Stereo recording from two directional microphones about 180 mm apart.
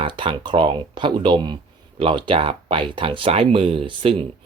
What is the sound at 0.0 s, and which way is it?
Speech, 25° right (ahead or behind).